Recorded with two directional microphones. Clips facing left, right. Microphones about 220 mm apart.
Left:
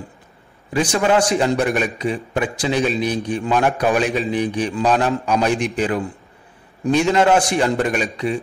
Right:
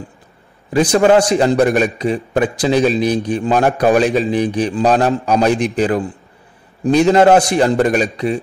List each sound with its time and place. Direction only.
0.7 s a man's voice: 40° right (ahead or behind)